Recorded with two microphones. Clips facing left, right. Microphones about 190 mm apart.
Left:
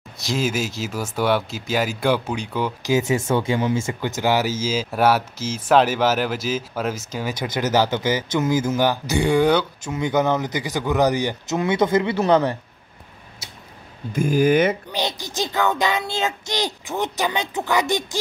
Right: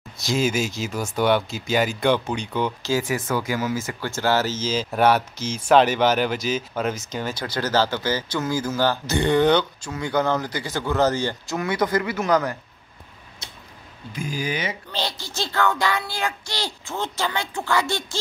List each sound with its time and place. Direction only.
0.2 s speech: centre (ahead or behind)
2.8 s speech: 20° left (ahead or behind); by 7.3 s 5° left (ahead or behind)
7.3 s speech: 20° left (ahead or behind)
9.8 s speech: 20° left (ahead or behind)
14.1 s speech: 50° left (ahead or behind)
14.9 s speech: 15° left (ahead or behind)